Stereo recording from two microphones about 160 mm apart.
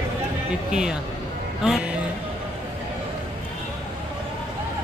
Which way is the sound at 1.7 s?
Centre (ahead or behind).